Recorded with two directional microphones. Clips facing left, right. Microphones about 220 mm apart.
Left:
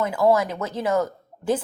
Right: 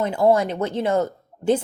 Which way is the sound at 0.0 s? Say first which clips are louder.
Right 2 dB; 25° right (ahead or behind).